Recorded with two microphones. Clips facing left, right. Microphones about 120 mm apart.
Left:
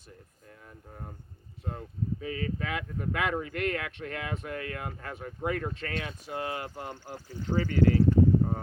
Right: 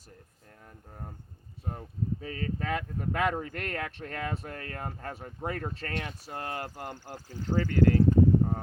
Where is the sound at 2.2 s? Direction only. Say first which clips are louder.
Even; 40° right (ahead or behind).